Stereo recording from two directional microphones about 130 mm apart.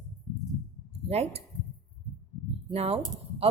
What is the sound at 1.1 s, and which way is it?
Speech, 55° right (ahead or behind).